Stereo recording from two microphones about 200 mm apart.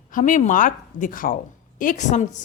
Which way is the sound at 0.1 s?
40° left (ahead or behind).